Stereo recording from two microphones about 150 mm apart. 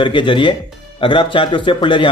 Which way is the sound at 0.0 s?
30° left (ahead or behind).